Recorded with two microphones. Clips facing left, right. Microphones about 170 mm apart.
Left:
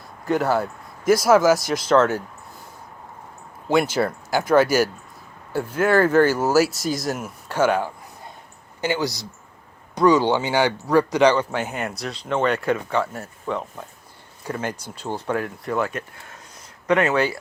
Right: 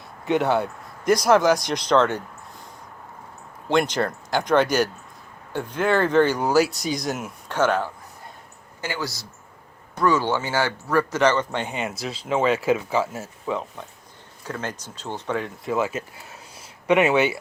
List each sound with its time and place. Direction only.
0.3 s speech: centre (ahead or behind)
3.7 s speech: 5° left (ahead or behind)
8.8 s speech: 20° left (ahead or behind); by 13.8 s centre (ahead or behind)
14.4 s speech: 10° left (ahead or behind); by 17.3 s 10° right (ahead or behind)